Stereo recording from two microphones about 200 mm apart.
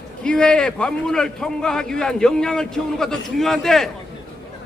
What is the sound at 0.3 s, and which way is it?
A man's voice, 5° left (ahead or behind).